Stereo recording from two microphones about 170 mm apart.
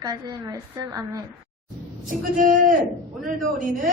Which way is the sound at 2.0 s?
50° right (ahead or behind).